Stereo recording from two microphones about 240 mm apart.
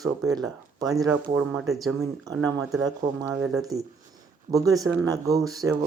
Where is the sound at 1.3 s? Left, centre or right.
Centre.